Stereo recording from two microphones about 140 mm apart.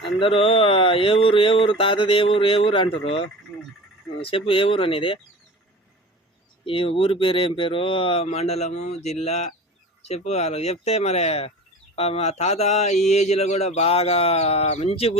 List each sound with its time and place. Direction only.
0.0 s speech: 40° left (ahead or behind)
6.7 s speech: 40° left (ahead or behind)